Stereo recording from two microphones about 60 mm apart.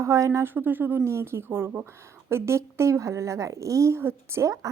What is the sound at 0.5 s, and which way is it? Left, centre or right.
Speech, right.